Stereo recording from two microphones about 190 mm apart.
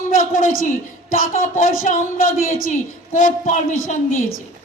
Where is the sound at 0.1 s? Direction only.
45° left (ahead or behind).